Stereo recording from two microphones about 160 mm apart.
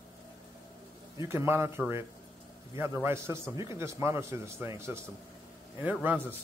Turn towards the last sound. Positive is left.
turn(degrees=-10)  # may be behind; listen again after turning